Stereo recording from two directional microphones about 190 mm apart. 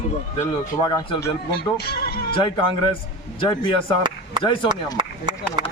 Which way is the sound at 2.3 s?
25° left (ahead or behind).